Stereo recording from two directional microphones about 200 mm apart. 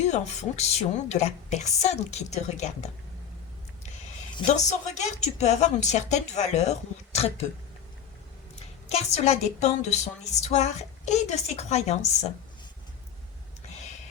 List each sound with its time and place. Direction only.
0.0 s speech: 35° left (ahead or behind)
8.5 s a woman's voice: 35° left (ahead or behind)
13.7 s a sound: 35° left (ahead or behind)